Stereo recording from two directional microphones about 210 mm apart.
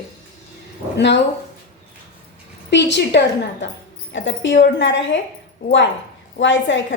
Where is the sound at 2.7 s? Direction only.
55° left (ahead or behind).